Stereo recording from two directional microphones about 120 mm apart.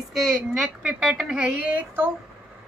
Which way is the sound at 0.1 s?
5° right (ahead or behind).